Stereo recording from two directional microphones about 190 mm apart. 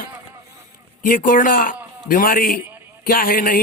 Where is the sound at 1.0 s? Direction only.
45° left (ahead or behind).